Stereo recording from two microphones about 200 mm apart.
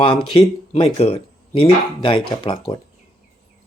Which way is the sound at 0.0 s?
25° left (ahead or behind).